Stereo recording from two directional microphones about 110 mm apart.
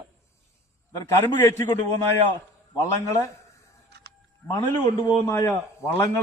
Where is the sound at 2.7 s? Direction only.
30° left (ahead or behind).